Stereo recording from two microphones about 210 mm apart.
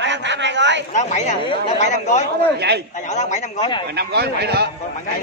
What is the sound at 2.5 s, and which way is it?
Speech, 50° right (ahead or behind).